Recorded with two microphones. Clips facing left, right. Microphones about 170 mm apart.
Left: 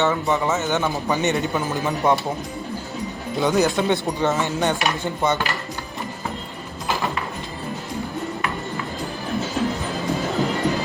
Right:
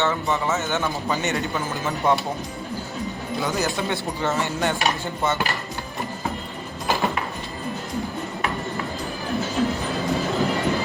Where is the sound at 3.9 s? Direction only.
20° left (ahead or behind).